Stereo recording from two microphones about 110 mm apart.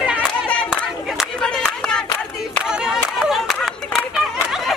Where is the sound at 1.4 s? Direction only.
5° left (ahead or behind).